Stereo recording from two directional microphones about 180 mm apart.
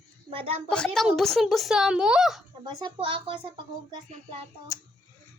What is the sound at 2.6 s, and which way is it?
Speech, 25° right (ahead or behind).